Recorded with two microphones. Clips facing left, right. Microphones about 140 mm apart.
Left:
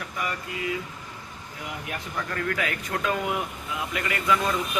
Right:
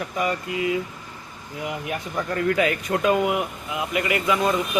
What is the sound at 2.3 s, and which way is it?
A man's voice, 25° right (ahead or behind).